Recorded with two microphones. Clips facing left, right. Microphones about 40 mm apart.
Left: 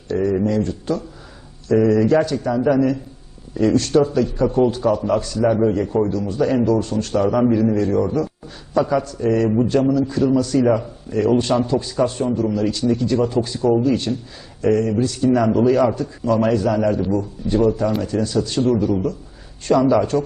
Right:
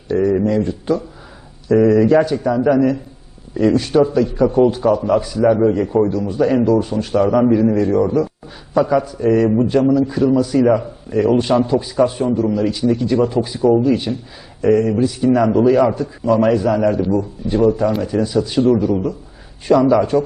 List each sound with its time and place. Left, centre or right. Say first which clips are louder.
0.1 s a man's voice: right 3 dB; centre